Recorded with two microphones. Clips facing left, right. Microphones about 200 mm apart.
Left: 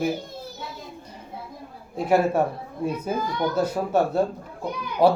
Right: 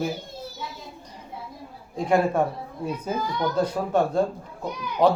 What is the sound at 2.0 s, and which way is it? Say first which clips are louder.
Speech: left 1 dB; 5° left (ahead or behind).